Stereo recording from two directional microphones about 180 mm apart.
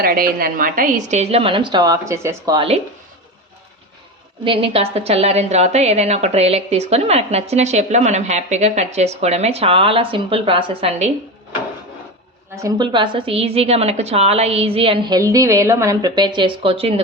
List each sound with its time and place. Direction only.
0.0 s a woman's voice: 55° right (ahead or behind); by 2.6 s 15° right (ahead or behind)
2.6 s a woman's voice: 35° right (ahead or behind)
4.4 s a woman's voice: 30° right (ahead or behind)
12.6 s a woman's voice: 25° right (ahead or behind)